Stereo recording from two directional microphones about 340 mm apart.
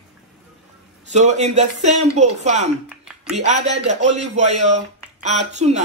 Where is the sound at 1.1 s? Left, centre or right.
Centre.